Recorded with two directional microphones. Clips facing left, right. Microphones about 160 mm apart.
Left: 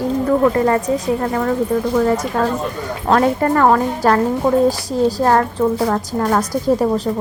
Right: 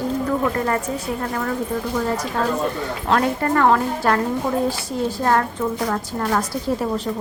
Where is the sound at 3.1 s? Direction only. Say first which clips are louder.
Left 5 dB; 40° left (ahead or behind).